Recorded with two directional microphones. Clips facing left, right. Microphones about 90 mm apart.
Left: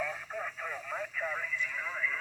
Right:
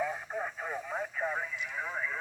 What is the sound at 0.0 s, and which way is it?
Radio, 25° right (ahead or behind).